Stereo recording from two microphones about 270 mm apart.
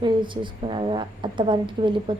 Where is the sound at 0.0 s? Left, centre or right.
Centre.